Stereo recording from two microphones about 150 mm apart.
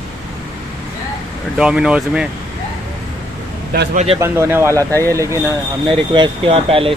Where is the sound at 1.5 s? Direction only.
5° right (ahead or behind).